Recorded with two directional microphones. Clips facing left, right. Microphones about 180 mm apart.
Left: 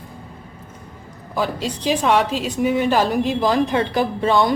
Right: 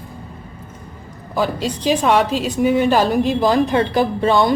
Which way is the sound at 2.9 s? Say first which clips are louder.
Right 2 dB; 35° right (ahead or behind).